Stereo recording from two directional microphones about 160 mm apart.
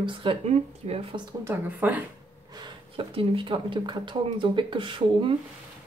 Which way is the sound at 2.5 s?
30° right (ahead or behind).